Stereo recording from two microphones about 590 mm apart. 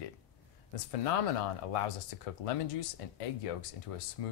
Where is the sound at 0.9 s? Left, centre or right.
Left.